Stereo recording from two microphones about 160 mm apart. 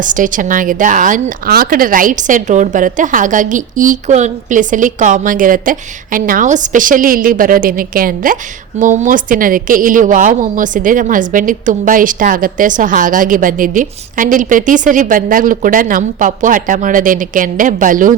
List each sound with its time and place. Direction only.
0.0 s a woman's voice: 55° right (ahead or behind)